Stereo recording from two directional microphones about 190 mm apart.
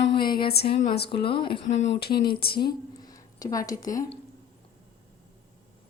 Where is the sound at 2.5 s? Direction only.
20° left (ahead or behind).